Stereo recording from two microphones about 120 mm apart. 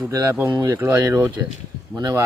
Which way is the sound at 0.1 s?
30° right (ahead or behind).